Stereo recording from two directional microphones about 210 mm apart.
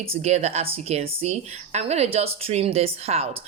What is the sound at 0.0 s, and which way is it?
Speech, 30° right (ahead or behind).